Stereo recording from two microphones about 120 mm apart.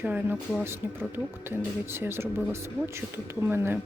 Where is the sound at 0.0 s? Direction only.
15° right (ahead or behind).